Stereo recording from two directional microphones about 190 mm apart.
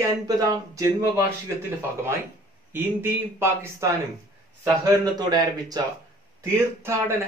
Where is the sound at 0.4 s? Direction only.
20° right (ahead or behind).